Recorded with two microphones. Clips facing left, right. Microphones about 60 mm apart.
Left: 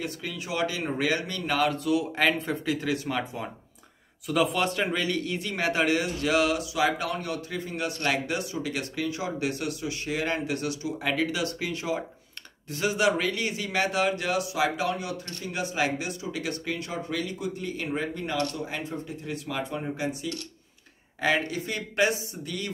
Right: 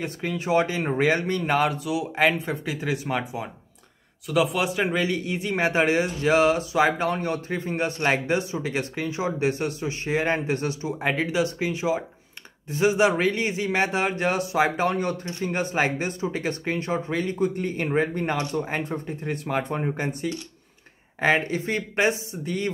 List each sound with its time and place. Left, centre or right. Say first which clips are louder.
0.0 s speech: right 5 dB; right
1.9 s speech: right 2 dB; centre
4.3 s a man's voice: right 2 dB; centre; by 20.2 s right
21.2 s speech: right 4 dB; right